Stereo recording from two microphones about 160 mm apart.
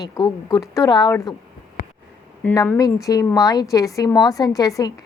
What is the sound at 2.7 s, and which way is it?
A woman's voice, 20° left (ahead or behind).